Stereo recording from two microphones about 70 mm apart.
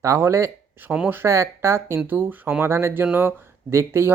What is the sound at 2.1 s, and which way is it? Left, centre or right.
Speech, right.